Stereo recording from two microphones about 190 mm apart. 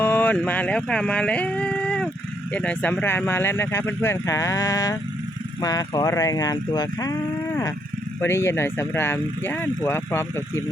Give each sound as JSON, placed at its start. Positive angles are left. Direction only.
{"t": 0.0, "sound": "speech", "side_deg": 10}